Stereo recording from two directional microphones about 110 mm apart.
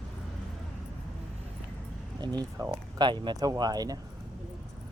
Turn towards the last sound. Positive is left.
turn(degrees=-35)  # may be behind; listen again after turning